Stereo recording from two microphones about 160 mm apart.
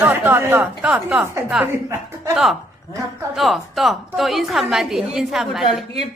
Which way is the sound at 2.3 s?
Centre (ahead or behind).